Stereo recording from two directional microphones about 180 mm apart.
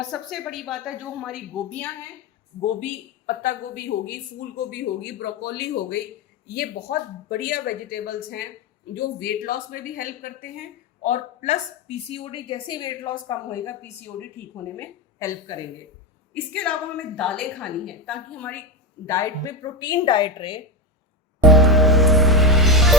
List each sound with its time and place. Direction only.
0.1 s a woman's voice: centre (ahead or behind)
3.2 s a woman's voice: 55° left (ahead or behind); by 20.6 s 30° left (ahead or behind)
21.4 s music: centre (ahead or behind)